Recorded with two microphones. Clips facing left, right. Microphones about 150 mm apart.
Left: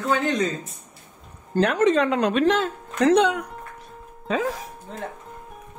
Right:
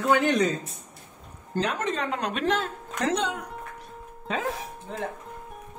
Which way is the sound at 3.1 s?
75° left (ahead or behind).